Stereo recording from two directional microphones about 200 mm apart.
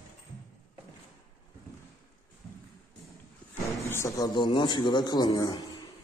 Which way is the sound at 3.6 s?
15° left (ahead or behind).